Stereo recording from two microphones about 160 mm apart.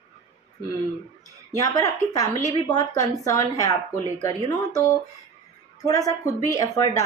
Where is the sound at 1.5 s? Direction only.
20° left (ahead or behind).